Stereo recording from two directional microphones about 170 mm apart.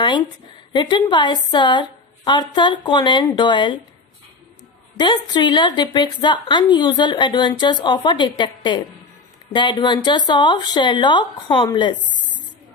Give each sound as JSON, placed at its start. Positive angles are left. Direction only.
{"t": 0.7, "sound": "speech", "side_deg": 25}
{"t": 4.9, "sound": "speech", "side_deg": 25}